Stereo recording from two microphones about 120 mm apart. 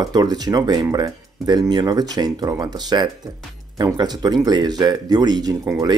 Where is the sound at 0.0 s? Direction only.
35° right (ahead or behind).